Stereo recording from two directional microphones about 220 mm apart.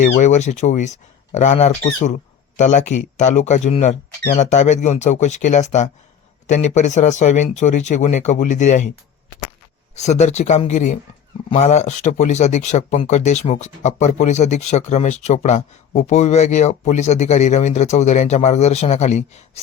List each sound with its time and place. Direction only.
0.0 s speech: 30° left (ahead or behind)
9.9 s speech: 30° left (ahead or behind)